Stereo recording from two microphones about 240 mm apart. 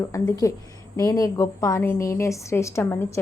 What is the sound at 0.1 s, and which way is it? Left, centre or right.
Speech, centre.